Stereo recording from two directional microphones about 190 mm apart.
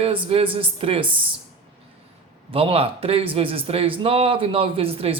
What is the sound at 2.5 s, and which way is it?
A man's voice, 30° right (ahead or behind).